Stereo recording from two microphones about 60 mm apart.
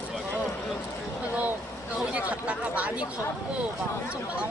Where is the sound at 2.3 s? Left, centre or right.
Right.